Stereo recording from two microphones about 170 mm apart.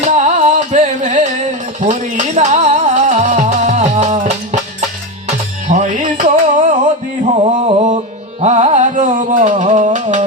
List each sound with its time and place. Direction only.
0.0 s music: 45° right (ahead or behind)
5.6 s music: 45° right (ahead or behind)
7.4 s a sound: 40° right (ahead or behind)
8.4 s music: 40° right (ahead or behind)